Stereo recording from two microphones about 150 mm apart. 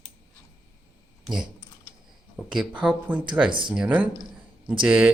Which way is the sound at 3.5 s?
35° right (ahead or behind).